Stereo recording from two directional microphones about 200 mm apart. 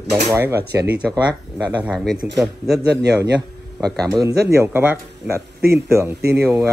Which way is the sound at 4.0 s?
15° right (ahead or behind).